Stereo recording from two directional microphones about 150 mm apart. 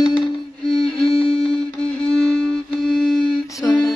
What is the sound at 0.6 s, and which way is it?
Music, centre (ahead or behind).